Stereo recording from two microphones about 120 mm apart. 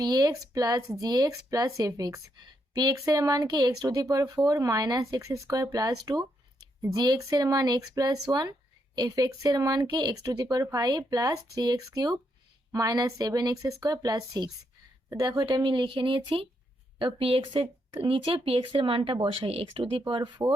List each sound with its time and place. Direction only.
0.0 s speech: 35° right (ahead or behind)